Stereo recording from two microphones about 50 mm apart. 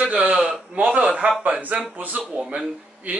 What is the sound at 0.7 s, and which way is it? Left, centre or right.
Speech, right.